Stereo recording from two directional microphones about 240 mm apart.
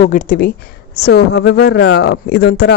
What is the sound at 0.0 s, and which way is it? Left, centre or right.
A woman's voice, left.